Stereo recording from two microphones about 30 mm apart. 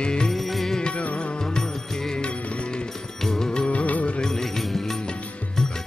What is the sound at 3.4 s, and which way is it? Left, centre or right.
Music, left.